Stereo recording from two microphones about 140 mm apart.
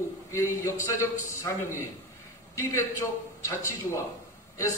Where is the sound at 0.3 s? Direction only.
20° left (ahead or behind).